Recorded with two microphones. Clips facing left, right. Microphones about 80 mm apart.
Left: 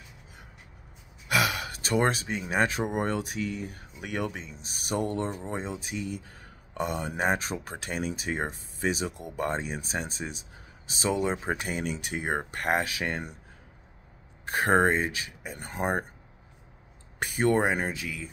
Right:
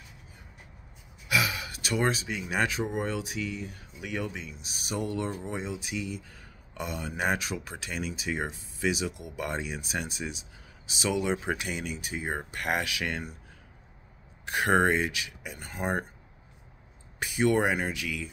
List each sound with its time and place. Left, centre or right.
1.3 s speech: left
12.6 s speech: left
14.4 s speech: left
17.2 s speech: left